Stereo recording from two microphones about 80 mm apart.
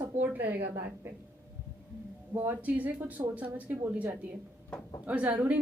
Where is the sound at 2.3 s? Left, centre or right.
Right.